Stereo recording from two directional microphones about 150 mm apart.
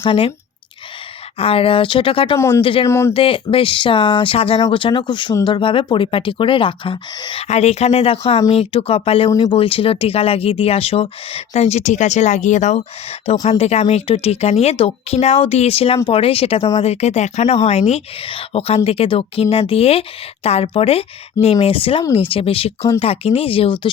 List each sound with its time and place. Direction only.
0.0 s speech: 40° left (ahead or behind)
1.4 s speech: 40° left (ahead or behind)
2.8 s speech: 20° left (ahead or behind)
3.1 s speech: 35° left (ahead or behind)
7.4 s speech: 45° left (ahead or behind)